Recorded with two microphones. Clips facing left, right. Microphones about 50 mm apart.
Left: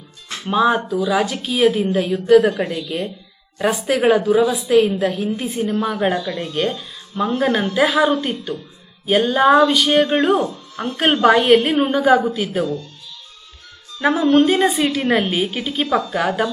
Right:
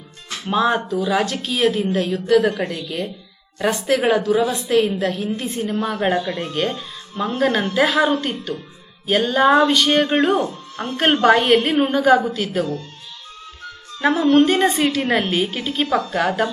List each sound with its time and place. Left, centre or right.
0.4 s a woman's voice: centre
6.1 s speech: right
6.5 s a woman's voice: centre
14.0 s a woman's voice: centre